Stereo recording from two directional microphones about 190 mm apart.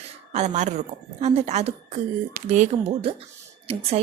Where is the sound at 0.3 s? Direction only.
35° right (ahead or behind).